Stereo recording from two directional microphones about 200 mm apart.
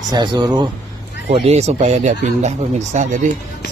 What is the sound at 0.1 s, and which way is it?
A man's voice, 20° right (ahead or behind).